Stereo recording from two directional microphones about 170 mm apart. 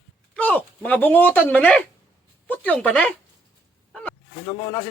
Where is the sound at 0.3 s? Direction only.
10° left (ahead or behind).